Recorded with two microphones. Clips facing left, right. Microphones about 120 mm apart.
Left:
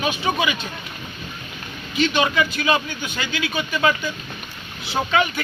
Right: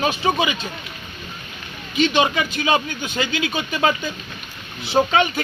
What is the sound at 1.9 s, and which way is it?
Speech, 25° right (ahead or behind).